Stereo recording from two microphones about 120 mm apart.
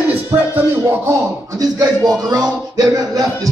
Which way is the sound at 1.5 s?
30° right (ahead or behind).